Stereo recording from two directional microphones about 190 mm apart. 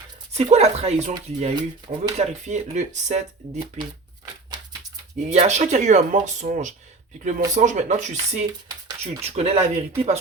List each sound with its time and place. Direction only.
0.3 s speech: 35° right (ahead or behind)
1.5 s speech: 25° right (ahead or behind)
2.1 s speech: 35° right (ahead or behind)
5.3 s speech: 35° right (ahead or behind)